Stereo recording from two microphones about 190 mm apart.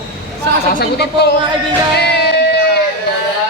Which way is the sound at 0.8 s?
60° left (ahead or behind).